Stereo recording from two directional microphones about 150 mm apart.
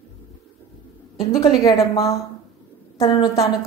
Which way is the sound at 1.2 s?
25° left (ahead or behind).